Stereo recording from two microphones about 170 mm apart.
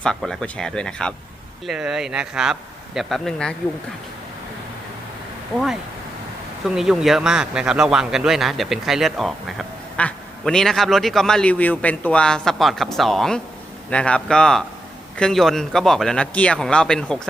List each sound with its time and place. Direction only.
0.0 s a man's voice: 5° left (ahead or behind)
6.7 s a man's voice: centre (ahead or behind)